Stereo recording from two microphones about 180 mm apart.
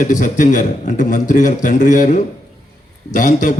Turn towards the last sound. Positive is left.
turn(degrees=45)  # may be behind; listen again after turning